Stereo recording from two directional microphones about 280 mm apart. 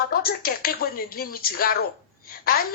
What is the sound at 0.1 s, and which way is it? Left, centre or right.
Speech, left.